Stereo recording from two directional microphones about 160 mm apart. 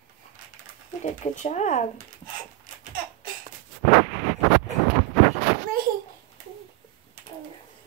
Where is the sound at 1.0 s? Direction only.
45° left (ahead or behind).